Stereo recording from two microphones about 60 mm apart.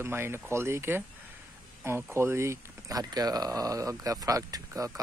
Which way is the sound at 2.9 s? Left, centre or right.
Right.